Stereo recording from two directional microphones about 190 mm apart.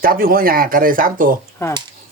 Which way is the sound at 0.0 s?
50° right (ahead or behind).